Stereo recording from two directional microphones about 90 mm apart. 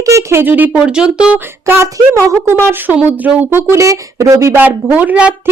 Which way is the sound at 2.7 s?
20° right (ahead or behind).